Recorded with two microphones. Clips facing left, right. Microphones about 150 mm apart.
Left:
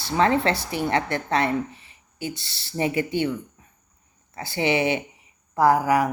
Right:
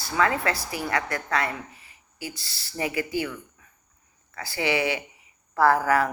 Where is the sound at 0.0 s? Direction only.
25° left (ahead or behind).